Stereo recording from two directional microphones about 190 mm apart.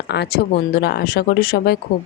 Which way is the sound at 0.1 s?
60° left (ahead or behind).